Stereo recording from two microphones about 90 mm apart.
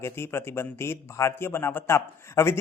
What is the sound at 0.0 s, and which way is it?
A man's voice, 25° left (ahead or behind).